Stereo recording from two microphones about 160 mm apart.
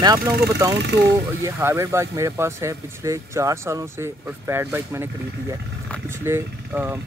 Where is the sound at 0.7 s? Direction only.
90° right.